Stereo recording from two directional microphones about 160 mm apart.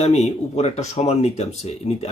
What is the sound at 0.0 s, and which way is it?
Speech, 45° left (ahead or behind).